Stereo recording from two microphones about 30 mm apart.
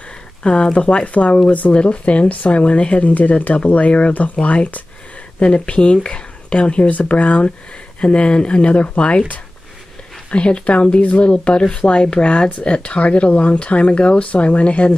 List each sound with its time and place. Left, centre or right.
0.4 s speech: left
1.7 s speech: left
6.9 s speech: left
8.0 s speech: left
10.3 s speech: left
11.2 s speech: left